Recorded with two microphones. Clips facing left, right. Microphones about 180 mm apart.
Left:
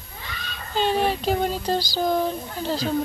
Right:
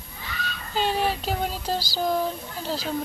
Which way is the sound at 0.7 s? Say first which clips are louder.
Left 3 dB; 5° right (ahead or behind).